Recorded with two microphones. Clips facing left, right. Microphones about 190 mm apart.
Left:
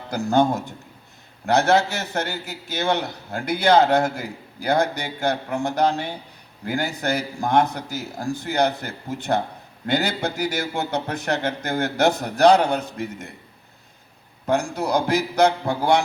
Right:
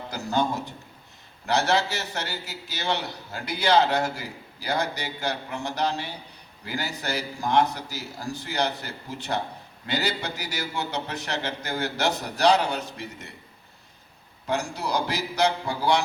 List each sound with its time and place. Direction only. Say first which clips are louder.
0.1 s a man's voice: left 7 dB; 50° left (ahead or behind)
14.4 s a man's voice: left 6 dB; 50° left (ahead or behind)